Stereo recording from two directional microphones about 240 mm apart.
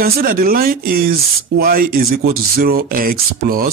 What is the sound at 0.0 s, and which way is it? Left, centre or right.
Speech, right.